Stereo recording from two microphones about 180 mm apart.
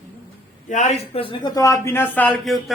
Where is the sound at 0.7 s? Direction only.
40° left (ahead or behind).